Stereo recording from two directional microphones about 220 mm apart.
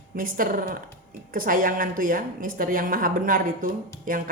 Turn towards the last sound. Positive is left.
turn(degrees=-40)  # may be behind; listen again after turning